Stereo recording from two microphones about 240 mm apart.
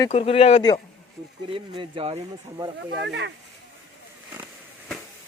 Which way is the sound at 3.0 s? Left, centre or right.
Right.